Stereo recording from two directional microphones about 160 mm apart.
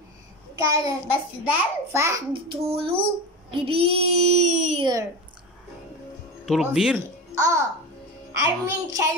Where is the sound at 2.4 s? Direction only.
35° right (ahead or behind).